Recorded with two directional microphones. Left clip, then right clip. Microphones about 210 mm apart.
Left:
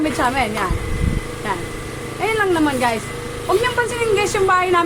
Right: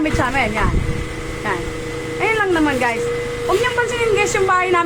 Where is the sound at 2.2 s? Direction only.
Centre (ahead or behind).